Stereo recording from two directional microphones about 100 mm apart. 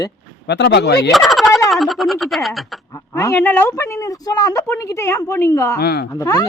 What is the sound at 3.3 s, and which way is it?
A woman's voice, 20° left (ahead or behind).